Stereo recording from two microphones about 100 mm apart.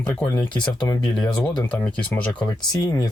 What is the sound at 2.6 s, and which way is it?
Speech, 45° left (ahead or behind).